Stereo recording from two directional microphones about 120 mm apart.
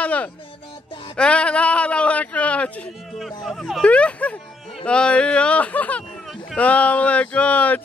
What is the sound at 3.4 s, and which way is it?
Speech, centre (ahead or behind).